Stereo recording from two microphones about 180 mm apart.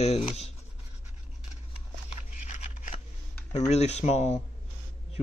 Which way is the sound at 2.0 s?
40° left (ahead or behind).